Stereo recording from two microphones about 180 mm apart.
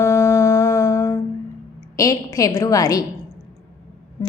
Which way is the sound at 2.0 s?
20° left (ahead or behind).